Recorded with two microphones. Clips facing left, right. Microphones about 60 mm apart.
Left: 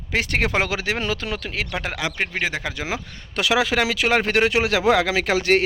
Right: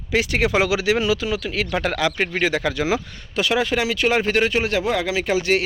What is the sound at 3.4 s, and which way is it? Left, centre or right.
Speech, left.